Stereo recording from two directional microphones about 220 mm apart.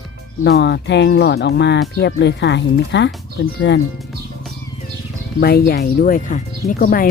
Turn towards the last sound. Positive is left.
turn(degrees=40)  # may be behind; listen again after turning